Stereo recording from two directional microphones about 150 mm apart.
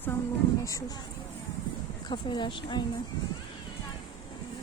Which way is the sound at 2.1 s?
30° left (ahead or behind).